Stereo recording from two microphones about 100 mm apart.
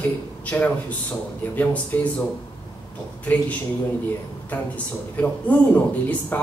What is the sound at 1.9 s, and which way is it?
Speech, 20° left (ahead or behind).